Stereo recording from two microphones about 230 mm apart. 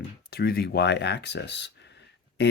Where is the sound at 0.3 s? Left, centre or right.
Left.